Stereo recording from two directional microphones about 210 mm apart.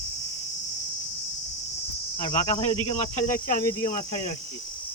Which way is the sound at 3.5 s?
40° left (ahead or behind).